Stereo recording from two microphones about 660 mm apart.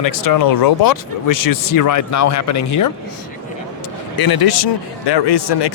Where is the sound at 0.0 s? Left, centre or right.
Left.